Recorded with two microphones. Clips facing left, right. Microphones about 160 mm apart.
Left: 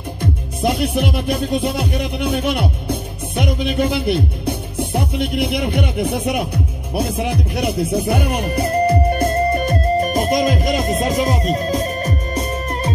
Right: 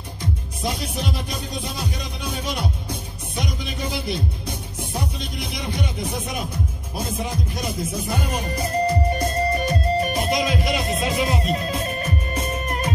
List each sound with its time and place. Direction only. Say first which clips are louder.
0.2 s music: left 7 dB; 60° left (ahead or behind); by 12.9 s 35° left (ahead or behind)